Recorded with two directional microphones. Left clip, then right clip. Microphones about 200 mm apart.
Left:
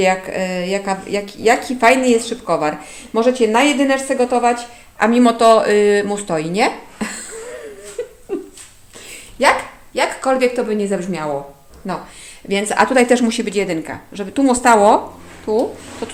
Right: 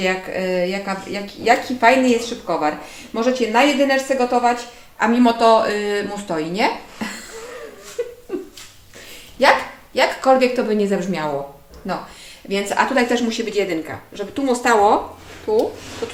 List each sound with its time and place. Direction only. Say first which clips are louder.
0.0 s a woman's voice: left 4 dB; 45° left (ahead or behind)
8.3 s a sound: left 7 dB; 30° left (ahead or behind)
9.9 s a woman's voice: right 2 dB; 15° left (ahead or behind)
11.9 s a woman's voice: left 1 dB; 35° left (ahead or behind)